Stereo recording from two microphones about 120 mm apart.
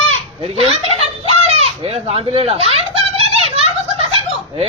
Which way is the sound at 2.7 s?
55° right (ahead or behind).